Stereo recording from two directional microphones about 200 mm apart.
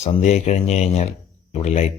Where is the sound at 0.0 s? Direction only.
35° left (ahead or behind).